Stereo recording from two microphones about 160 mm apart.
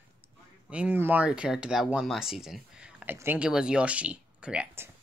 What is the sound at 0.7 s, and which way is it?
Speech, 10° right (ahead or behind).